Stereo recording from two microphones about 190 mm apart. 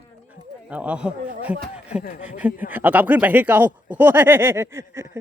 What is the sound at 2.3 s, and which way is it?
Speech, 10° right (ahead or behind).